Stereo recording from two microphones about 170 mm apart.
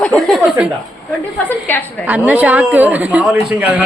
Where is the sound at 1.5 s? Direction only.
10° left (ahead or behind).